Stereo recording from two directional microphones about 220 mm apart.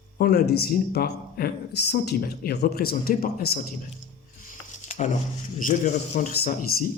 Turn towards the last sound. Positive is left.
turn(degrees=40)  # may be behind; listen again after turning